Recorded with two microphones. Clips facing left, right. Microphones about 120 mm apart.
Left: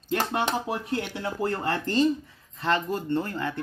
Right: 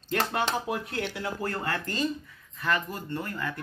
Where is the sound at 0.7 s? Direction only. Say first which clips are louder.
Left 2 dB; 25° left (ahead or behind).